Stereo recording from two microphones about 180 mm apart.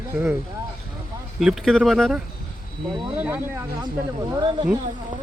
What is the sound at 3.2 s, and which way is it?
Speech, 10° right (ahead or behind).